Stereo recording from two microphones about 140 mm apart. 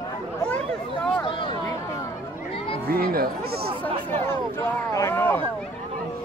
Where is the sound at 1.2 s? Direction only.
35° left (ahead or behind).